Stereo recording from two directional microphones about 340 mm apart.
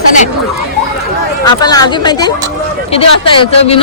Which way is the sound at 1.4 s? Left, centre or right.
Centre.